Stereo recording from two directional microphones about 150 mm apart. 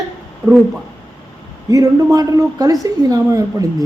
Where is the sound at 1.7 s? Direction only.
25° right (ahead or behind).